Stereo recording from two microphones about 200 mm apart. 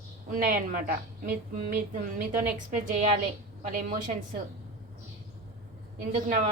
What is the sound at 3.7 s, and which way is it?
Speech, 40° right (ahead or behind).